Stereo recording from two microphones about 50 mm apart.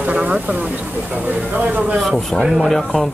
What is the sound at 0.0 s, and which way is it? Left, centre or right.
Speech, right.